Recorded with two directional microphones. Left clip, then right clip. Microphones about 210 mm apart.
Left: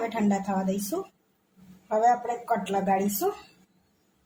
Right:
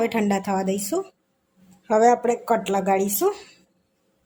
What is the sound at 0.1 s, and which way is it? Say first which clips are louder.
Speech: right 5 dB; 40° right (ahead or behind).